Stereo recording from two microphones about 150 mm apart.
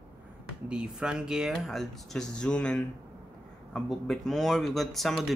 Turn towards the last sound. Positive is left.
turn(degrees=0)  # may be behind; listen again after turning